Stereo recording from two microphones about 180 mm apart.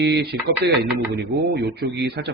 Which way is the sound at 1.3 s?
65° right (ahead or behind).